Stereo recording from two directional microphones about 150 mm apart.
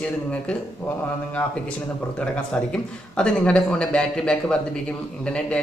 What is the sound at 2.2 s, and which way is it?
A man's voice, 5° left (ahead or behind).